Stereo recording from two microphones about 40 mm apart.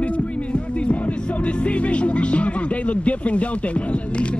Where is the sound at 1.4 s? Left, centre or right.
Left.